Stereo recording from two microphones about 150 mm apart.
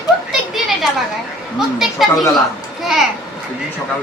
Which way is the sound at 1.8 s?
Centre (ahead or behind).